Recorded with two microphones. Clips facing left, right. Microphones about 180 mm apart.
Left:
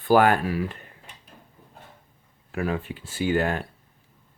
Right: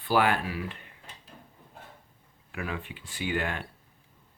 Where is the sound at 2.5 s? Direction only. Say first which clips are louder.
Left 8 dB; 40° left (ahead or behind).